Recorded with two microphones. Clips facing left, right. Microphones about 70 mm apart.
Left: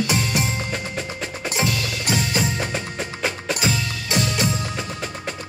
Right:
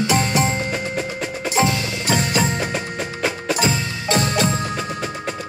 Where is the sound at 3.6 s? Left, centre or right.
Right.